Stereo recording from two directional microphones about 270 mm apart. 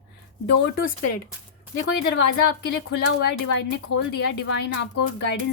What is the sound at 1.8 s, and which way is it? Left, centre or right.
A woman's voice, left.